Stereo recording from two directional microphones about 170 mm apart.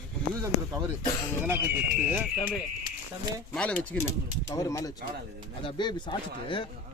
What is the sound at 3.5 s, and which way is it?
Speech, 5° left (ahead or behind).